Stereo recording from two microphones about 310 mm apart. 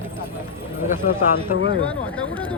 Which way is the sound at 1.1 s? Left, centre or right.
Left.